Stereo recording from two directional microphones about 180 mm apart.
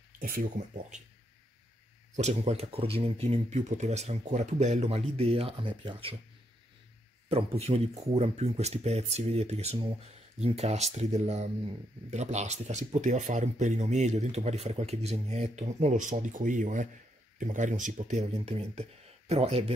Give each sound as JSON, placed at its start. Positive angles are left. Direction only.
{"t": 0.2, "sound": "speech", "side_deg": -50}
{"t": 2.1, "sound": "speech", "side_deg": -35}
{"t": 7.2, "sound": "speech", "side_deg": -35}